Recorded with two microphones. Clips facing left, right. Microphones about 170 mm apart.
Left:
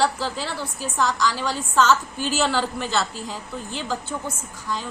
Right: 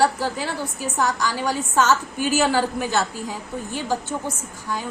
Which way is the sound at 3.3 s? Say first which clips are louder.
Right 2 dB; 10° right (ahead or behind).